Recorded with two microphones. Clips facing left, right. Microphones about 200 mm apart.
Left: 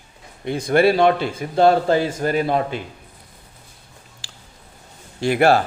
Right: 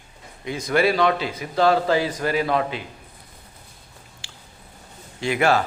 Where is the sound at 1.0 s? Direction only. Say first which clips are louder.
Left 4 dB; 50° left (ahead or behind).